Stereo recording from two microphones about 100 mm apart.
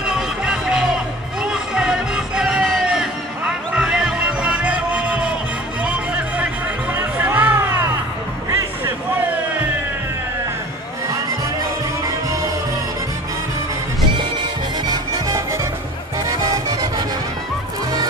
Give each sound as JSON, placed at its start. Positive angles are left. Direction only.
{"t": 0.0, "sound": "music", "side_deg": -5}
{"t": 14.9, "sound": "music", "side_deg": -35}